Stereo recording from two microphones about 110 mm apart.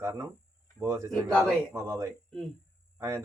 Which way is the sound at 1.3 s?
5° left (ahead or behind).